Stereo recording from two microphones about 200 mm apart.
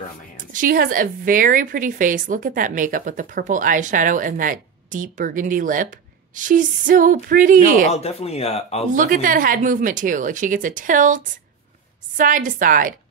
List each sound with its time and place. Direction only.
0.5 s a woman's voice: 45° right (ahead or behind)
7.9 s speech: 30° left (ahead or behind)
8.9 s a woman's voice: 40° right (ahead or behind)